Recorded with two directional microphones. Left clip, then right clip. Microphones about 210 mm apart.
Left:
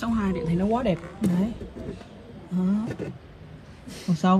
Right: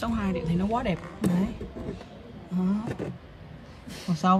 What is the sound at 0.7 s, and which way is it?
Speech, 15° right (ahead or behind).